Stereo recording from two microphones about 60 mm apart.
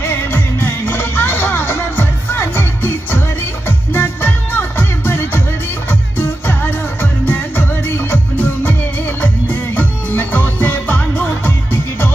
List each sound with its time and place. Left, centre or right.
0.0 s music: left